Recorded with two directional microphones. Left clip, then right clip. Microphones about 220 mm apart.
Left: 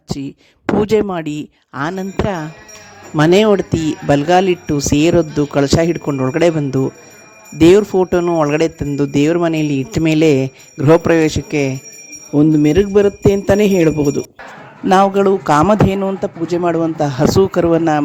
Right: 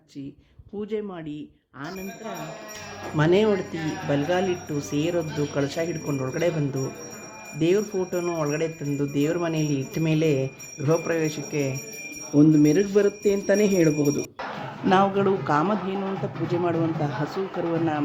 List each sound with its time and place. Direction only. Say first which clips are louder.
0.8 s speech: left 15 dB; 50° left (ahead or behind)